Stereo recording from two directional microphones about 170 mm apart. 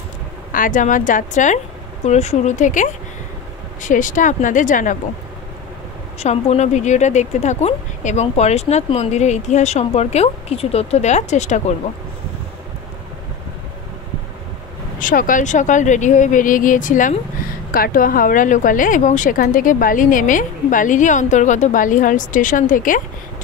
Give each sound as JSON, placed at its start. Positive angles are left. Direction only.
{"t": 0.5, "sound": "speech", "side_deg": 50}
{"t": 6.1, "sound": "speech", "side_deg": 40}
{"t": 15.0, "sound": "speech", "side_deg": 50}